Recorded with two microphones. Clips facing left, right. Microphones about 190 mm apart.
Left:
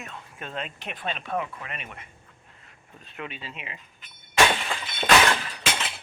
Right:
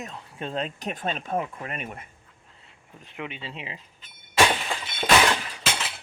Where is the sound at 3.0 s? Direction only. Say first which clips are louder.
Right 2 dB; 20° right (ahead or behind).